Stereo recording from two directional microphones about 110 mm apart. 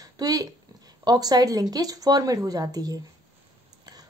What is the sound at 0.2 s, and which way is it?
Speech, 35° right (ahead or behind).